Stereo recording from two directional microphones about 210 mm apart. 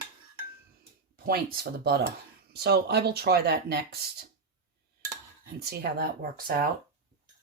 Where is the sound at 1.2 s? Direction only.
45° right (ahead or behind).